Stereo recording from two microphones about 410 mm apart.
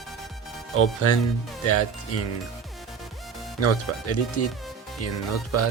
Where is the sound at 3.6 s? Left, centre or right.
Left.